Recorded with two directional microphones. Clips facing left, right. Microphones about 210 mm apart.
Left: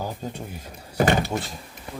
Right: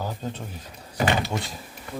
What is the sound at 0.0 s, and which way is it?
Speech, 10° left (ahead or behind).